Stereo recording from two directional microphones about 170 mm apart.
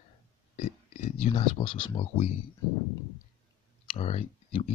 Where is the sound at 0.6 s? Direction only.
40° left (ahead or behind).